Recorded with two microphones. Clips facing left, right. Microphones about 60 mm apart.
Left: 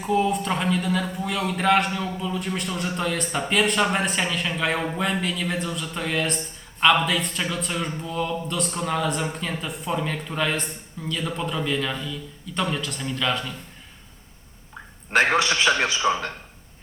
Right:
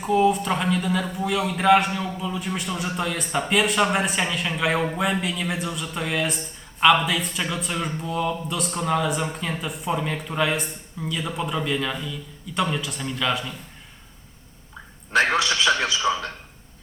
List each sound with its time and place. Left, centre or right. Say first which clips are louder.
0.0 s a man's voice: right 3 dB; centre
15.1 s a man's voice: left 1 dB; left